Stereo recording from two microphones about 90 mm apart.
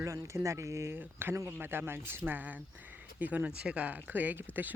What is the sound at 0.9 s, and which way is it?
Speech, 25° right (ahead or behind).